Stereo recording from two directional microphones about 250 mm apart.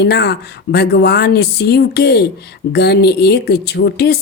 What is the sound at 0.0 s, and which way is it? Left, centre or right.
A woman's voice, left.